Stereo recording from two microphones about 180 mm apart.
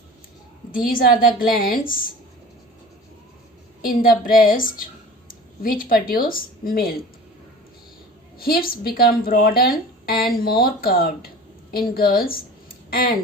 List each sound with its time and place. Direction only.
0.9 s a woman's voice: 50° left (ahead or behind)
3.8 s a woman's voice: 55° left (ahead or behind)
8.4 s speech: 55° left (ahead or behind)